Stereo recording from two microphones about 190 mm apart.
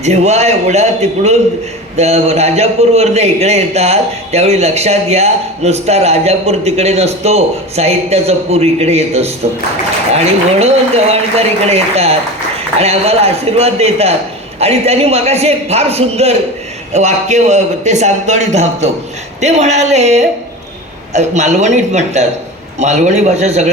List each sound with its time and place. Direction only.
0.0 s a man's voice: 35° right (ahead or behind)